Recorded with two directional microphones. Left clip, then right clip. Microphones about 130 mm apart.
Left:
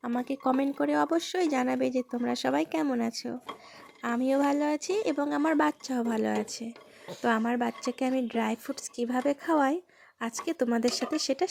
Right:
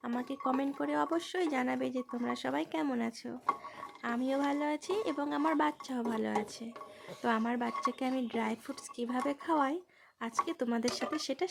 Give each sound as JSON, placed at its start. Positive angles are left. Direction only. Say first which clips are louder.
{"t": 0.0, "sound": "speech", "louder": "left 6 dB", "side_deg": 40}